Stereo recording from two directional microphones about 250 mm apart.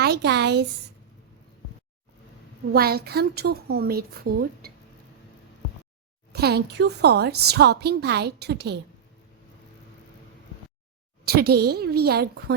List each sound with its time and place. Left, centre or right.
0.0 s a woman's voice: right
2.7 s a woman's voice: right
6.3 s a woman's voice: right
11.3 s a woman's voice: right